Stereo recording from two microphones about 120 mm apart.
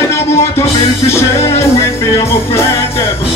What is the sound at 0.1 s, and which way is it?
Music, 20° left (ahead or behind).